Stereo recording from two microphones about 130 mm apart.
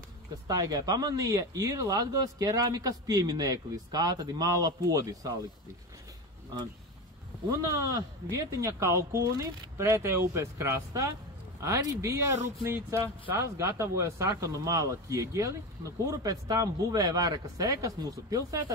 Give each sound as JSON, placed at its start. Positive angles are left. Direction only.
{"t": 0.5, "sound": "speech", "side_deg": -30}
{"t": 7.7, "sound": "speech", "side_deg": -25}